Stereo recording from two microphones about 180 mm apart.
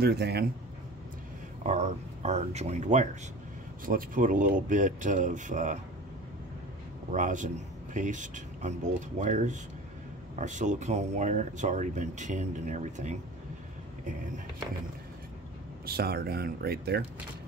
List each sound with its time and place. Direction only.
0.0 s speech: 65° right (ahead or behind)
1.6 s speech: 40° right (ahead or behind)
7.1 s speech: 45° right (ahead or behind)
15.8 s speech: 60° right (ahead or behind)